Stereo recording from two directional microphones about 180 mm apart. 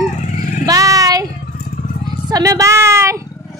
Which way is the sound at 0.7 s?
20° right (ahead or behind).